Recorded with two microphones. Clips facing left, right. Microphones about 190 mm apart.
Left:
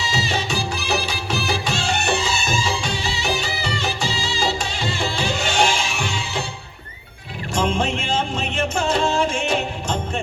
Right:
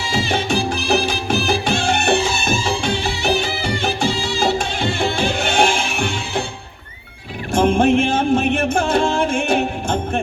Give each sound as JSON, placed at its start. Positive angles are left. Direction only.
{"t": 0.0, "sound": "music", "side_deg": -55}
{"t": 7.5, "sound": "music", "side_deg": -55}